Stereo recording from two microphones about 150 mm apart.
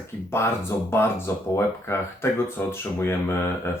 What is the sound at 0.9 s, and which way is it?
Speech, 15° left (ahead or behind).